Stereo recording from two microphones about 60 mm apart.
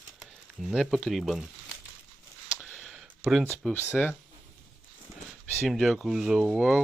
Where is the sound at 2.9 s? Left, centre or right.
Centre.